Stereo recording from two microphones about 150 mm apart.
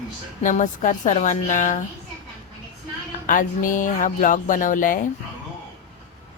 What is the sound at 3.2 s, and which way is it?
Speech, 60° left (ahead or behind).